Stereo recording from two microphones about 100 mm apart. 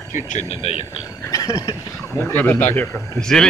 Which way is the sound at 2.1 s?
20° left (ahead or behind).